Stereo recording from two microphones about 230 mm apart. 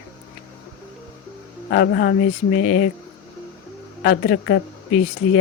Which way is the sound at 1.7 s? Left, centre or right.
Left.